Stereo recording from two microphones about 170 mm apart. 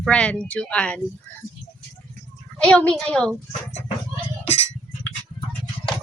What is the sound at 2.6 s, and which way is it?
Speech, 5° left (ahead or behind).